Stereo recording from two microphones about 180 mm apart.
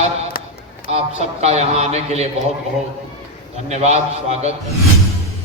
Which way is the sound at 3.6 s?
40° right (ahead or behind).